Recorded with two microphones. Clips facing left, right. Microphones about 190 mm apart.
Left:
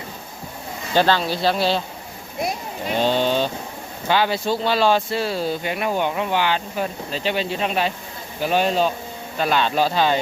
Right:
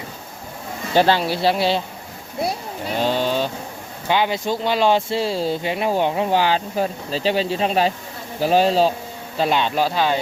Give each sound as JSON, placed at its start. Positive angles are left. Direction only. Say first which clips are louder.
{"t": 1.2, "sound": "speech", "louder": "right 1 dB", "side_deg": -5}
{"t": 2.9, "sound": "a sound", "louder": "left 1 dB", "side_deg": -5}
{"t": 4.1, "sound": "a man's voice", "louder": "even", "side_deg": -15}
{"t": 9.4, "sound": "speech", "louder": "even", "side_deg": -20}